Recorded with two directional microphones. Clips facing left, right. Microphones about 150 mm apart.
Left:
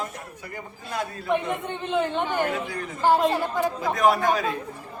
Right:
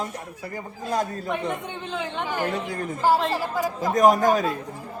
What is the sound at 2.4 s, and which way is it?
Speech, 40° right (ahead or behind).